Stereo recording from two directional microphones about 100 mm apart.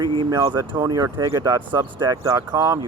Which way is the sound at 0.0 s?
55° right (ahead or behind).